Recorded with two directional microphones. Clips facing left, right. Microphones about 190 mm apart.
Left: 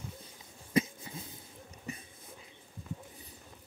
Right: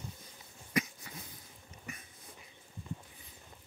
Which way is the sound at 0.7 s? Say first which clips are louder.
Left 5 dB; 25° left (ahead or behind).